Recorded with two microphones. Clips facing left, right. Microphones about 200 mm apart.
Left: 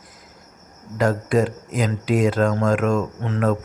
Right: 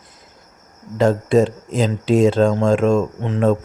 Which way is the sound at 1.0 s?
25° right (ahead or behind).